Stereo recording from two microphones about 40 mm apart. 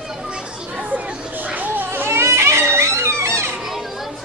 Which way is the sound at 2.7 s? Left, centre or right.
Right.